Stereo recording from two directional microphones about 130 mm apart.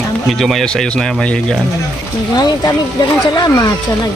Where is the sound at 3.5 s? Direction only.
25° left (ahead or behind).